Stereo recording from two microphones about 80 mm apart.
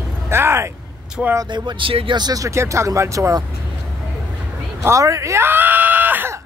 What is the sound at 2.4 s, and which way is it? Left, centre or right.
A man's voice, right.